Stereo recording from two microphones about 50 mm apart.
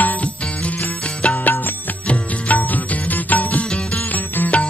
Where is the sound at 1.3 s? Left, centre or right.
Left.